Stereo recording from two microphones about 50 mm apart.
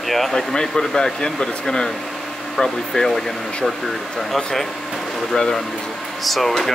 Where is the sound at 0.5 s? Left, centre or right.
Centre.